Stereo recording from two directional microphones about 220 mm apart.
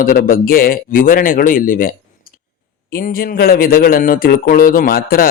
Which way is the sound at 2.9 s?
40° left (ahead or behind).